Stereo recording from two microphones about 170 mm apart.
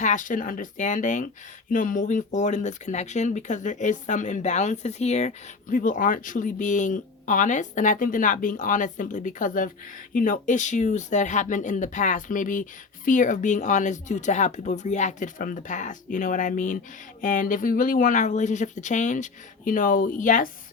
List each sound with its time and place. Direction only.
0.0 s speech: 50° left (ahead or behind)